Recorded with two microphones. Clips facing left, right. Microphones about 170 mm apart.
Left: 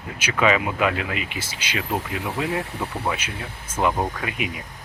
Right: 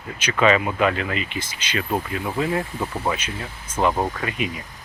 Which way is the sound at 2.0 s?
90° left.